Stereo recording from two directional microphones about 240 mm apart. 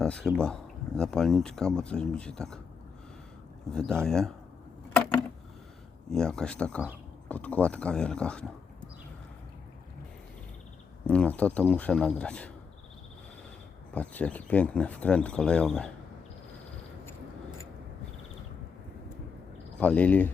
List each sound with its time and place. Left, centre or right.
0.0 s speech: centre
3.7 s speech: centre
6.1 s speech: centre
11.0 s speech: centre
13.9 s speech: centre
19.8 s speech: centre